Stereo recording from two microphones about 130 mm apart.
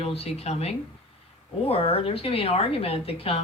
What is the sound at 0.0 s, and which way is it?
A woman's voice, 50° left (ahead or behind).